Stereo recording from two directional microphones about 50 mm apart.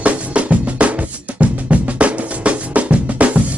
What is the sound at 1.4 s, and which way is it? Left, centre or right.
Drum, right.